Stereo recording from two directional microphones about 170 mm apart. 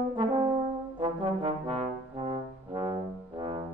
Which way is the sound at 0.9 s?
30° right (ahead or behind).